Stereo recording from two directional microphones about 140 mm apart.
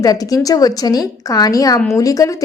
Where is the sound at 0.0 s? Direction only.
25° left (ahead or behind).